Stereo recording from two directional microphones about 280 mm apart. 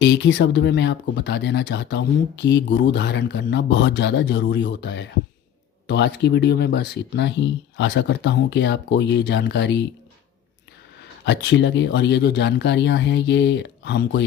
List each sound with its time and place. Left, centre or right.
0.0 s speech: left
11.3 s speech: left